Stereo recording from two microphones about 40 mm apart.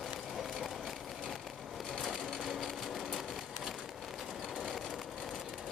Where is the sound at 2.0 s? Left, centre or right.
Centre.